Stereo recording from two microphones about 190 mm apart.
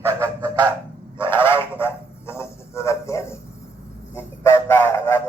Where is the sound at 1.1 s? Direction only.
10° left (ahead or behind).